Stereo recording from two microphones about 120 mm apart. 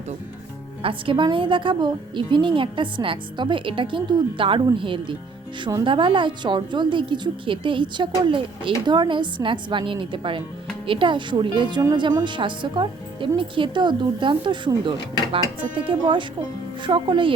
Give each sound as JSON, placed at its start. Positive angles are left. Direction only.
{"t": 0.8, "sound": "a woman's voice", "side_deg": -45}